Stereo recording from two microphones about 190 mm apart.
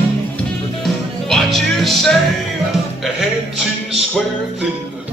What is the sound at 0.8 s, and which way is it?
Music, centre (ahead or behind).